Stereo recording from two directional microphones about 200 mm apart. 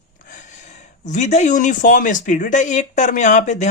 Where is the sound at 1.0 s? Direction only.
35° left (ahead or behind).